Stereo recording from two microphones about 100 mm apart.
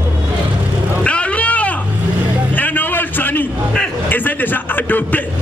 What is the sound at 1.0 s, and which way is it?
Vehicle, 10° left (ahead or behind).